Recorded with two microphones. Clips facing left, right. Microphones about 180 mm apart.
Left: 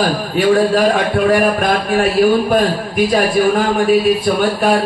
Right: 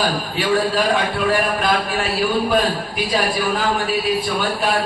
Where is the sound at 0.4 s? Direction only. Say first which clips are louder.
Left 7 dB; 45° left (ahead or behind).